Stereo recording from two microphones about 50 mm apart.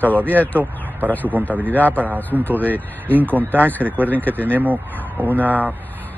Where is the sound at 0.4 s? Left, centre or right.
Left.